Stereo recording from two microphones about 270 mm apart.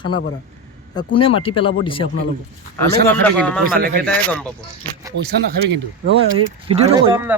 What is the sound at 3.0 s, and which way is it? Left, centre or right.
Speech, centre.